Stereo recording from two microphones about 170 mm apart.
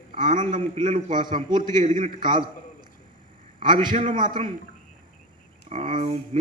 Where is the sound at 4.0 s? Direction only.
45° right (ahead or behind).